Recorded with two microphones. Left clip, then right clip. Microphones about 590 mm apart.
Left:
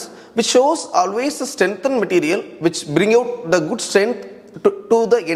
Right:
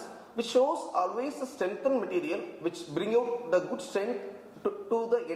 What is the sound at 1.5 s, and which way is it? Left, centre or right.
A man's voice, left.